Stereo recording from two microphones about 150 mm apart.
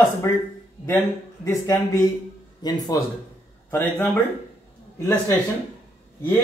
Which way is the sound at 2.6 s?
25° left (ahead or behind).